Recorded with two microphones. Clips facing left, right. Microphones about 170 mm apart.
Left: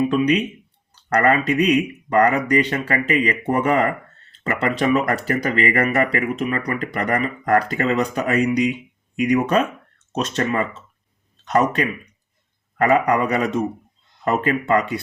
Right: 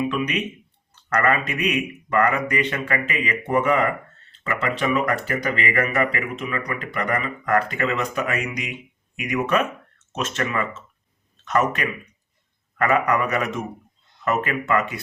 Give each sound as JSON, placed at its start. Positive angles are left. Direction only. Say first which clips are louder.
{"t": 0.1, "sound": "speech", "louder": "left 7 dB", "side_deg": 35}